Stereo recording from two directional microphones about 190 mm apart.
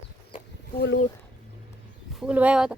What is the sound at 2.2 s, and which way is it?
Speech, 5° right (ahead or behind).